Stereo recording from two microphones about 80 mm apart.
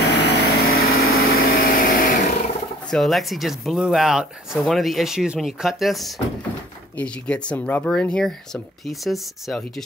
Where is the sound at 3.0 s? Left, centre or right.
Centre.